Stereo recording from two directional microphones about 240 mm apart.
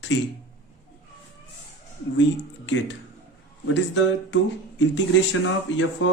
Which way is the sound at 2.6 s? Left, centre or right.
Left.